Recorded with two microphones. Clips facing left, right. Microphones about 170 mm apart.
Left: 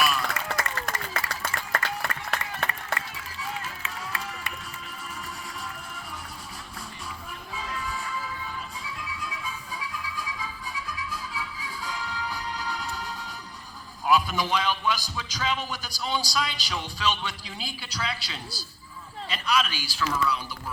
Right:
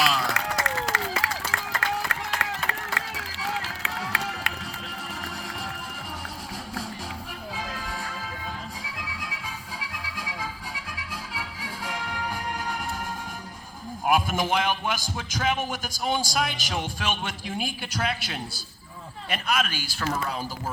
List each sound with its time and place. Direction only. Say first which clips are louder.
0.0 s a sound: right 2 dB; 85° right
2.0 s run: right 2 dB; 90° right
5.2 s music: right 3 dB; 85° right
7.5 s music: left 2 dB; 85° right; by 13.1 s 50° right (ahead or behind)
14.0 s a man's voice: even; 50° right (ahead or behind)